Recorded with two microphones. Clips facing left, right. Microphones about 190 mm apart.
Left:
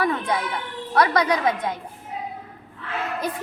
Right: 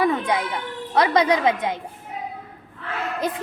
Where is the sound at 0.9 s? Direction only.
20° right (ahead or behind).